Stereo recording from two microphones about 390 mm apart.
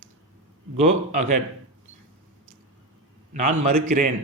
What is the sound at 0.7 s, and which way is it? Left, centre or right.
Speech, centre.